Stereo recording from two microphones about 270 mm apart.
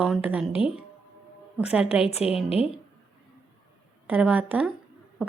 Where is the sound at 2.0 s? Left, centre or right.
Left.